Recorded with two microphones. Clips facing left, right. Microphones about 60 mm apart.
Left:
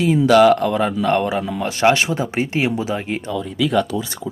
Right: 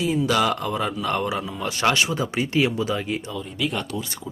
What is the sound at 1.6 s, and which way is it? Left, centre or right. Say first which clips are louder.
Speech: left 5 dB; left.